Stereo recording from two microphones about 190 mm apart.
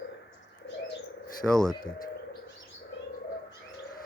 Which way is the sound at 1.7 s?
20° left (ahead or behind).